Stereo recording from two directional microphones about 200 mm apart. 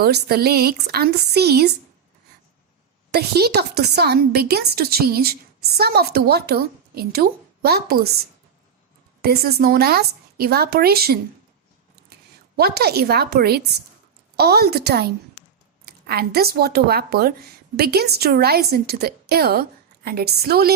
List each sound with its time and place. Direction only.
0.0 s a woman's voice: 50° right (ahead or behind)
3.1 s a woman's voice: 50° right (ahead or behind)
9.2 s a woman's voice: 50° right (ahead or behind)
12.5 s a woman's voice: 50° right (ahead or behind)